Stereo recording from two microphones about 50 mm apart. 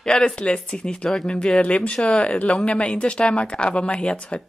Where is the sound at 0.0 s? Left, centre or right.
Centre.